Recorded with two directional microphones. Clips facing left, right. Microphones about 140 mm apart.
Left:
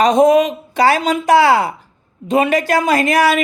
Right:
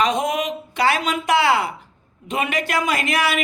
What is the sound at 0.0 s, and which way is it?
Speech, 35° left (ahead or behind).